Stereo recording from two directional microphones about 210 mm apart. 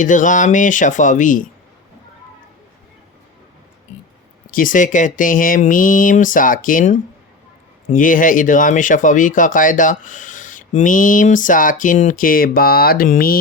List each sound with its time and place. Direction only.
0.0 s speech: 40° left (ahead or behind)
4.5 s speech: 40° left (ahead or behind)